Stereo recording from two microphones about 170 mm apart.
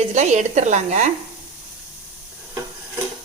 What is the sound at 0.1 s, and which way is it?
Speech, 45° right (ahead or behind).